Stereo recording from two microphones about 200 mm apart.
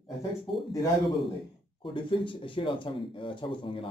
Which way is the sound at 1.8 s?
25° left (ahead or behind).